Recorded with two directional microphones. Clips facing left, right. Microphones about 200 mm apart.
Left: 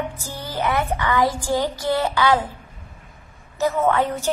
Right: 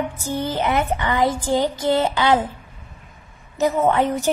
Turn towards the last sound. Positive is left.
turn(degrees=-20)  # may be behind; listen again after turning